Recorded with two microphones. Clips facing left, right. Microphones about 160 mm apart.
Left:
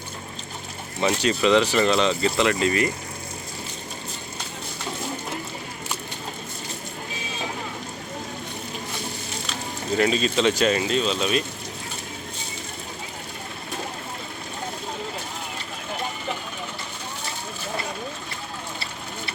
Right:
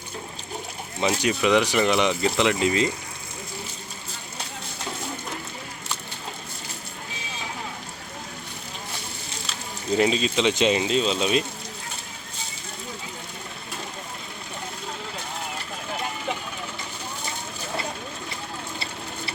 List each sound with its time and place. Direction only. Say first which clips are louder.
1.0 s speech: left 1 dB; 10° right (ahead or behind)
10.0 s speech: left 1 dB; 15° right (ahead or behind)